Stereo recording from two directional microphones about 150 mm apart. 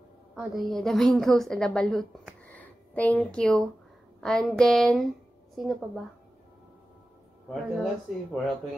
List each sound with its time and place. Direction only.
0.4 s a woman's voice: centre (ahead or behind)
7.4 s speech: centre (ahead or behind)